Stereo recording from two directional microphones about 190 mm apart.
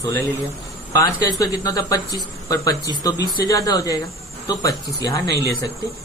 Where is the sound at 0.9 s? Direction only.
15° left (ahead or behind).